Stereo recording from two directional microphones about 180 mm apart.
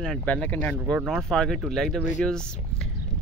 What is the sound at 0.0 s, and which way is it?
Speech, 5° left (ahead or behind).